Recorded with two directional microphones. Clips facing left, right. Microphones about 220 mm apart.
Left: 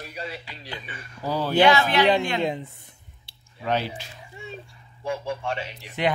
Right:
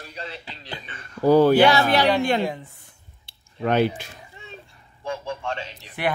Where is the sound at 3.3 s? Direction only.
55° right (ahead or behind).